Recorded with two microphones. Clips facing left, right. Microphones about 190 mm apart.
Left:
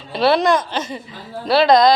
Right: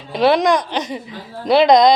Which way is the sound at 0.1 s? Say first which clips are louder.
Right 1 dB; 15° right (ahead or behind).